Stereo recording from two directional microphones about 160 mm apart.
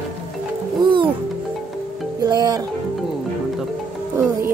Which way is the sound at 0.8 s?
30° right (ahead or behind).